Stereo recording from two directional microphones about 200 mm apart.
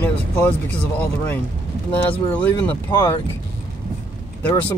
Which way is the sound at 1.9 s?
5° left (ahead or behind).